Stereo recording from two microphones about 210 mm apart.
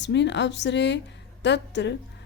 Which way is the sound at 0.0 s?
55° left (ahead or behind).